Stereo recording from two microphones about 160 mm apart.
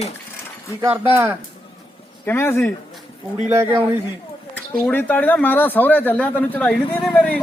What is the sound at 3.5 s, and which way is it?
Speech, 15° right (ahead or behind).